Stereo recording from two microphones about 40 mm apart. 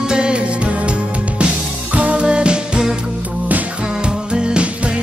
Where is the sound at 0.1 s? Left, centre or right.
Right.